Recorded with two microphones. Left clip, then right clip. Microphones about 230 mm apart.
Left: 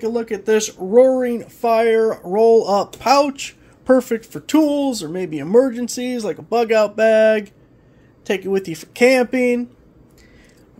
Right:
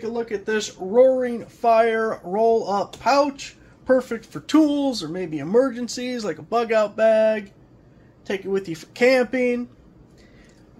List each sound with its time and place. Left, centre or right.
0.0 s speech: left